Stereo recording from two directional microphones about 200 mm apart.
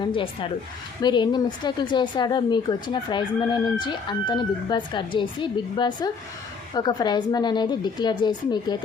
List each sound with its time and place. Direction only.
0.0 s a woman's voice: 25° left (ahead or behind)